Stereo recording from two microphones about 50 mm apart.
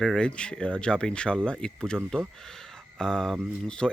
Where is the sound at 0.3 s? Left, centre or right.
Left.